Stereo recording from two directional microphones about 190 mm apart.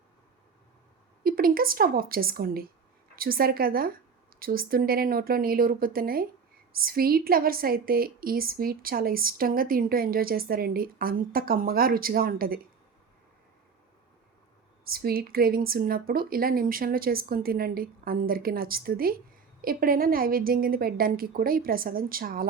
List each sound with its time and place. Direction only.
1.2 s a woman's voice: 50° right (ahead or behind)
14.8 s a woman's voice: 50° right (ahead or behind)